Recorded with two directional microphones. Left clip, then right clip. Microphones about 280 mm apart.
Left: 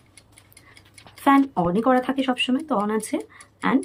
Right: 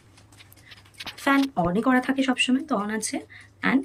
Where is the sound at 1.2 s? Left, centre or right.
Centre.